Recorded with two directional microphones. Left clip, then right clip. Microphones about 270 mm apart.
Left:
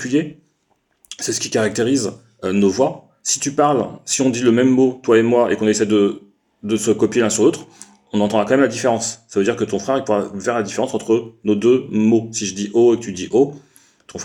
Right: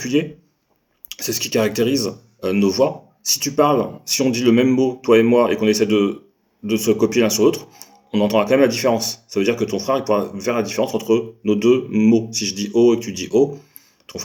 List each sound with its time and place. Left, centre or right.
0.0 s speech: left